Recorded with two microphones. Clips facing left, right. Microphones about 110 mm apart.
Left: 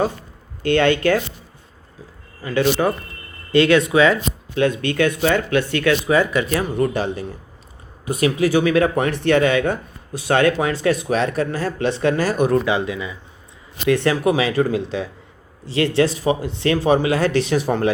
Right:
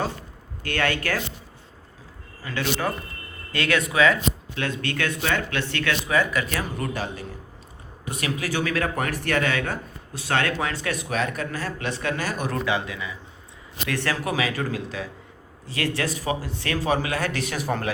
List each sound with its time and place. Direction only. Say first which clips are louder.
0.6 s speech: left 10 dB; 20° left (ahead or behind)
2.4 s speech: left 9 dB; 15° left (ahead or behind)
4.5 s speech: left 10 dB; 15° left (ahead or behind)
6.1 s speech: left 6 dB; 30° left (ahead or behind)
10.7 s speech: left 9 dB; 25° left (ahead or behind)
12.6 s speech: left 5 dB; 20° left (ahead or behind)